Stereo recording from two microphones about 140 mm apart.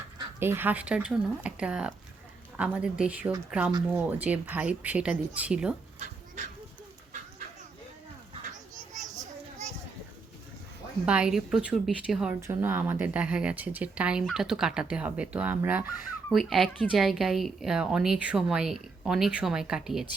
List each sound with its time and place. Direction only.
0.3 s a woman's voice: 15° right (ahead or behind)
6.4 s a sound: 55° right (ahead or behind)
11.0 s a woman's voice: 10° right (ahead or behind)
16.3 s a woman's voice: centre (ahead or behind)